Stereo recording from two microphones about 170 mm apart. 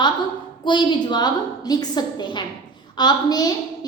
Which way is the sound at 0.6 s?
25° left (ahead or behind).